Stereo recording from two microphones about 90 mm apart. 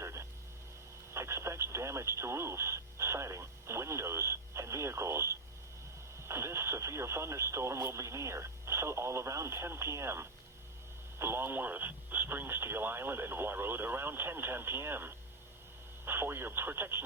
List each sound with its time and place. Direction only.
0.0 s frog: 30° right (ahead or behind)
1.1 s radio: 30° right (ahead or behind)
6.2 s speech: 30° right (ahead or behind)